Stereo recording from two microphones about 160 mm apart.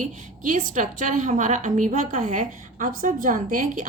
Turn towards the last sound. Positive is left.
turn(degrees=-55)  # may be behind; listen again after turning